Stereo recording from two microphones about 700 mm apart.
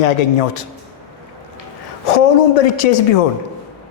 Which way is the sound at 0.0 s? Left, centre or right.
Left.